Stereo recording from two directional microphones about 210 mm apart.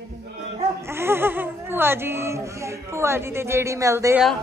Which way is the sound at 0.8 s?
10° right (ahead or behind).